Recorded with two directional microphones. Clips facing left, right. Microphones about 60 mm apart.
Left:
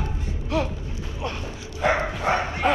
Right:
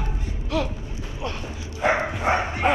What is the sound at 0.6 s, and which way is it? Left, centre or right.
Speech, left.